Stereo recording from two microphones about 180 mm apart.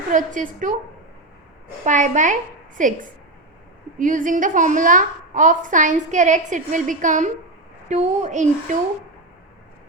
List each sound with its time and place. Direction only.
0.1 s a woman's voice: 45° right (ahead or behind)
1.8 s a woman's voice: 40° right (ahead or behind)